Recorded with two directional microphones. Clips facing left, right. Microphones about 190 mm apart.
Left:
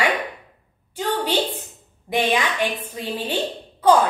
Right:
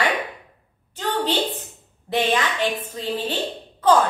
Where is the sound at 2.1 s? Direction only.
10° left (ahead or behind).